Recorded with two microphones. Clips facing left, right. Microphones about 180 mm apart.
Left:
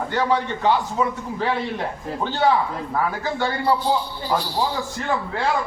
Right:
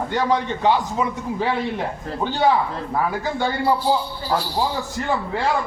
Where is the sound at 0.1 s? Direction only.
15° right (ahead or behind).